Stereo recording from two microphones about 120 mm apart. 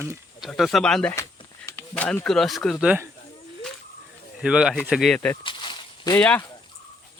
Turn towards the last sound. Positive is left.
turn(degrees=10)  # may be behind; listen again after turning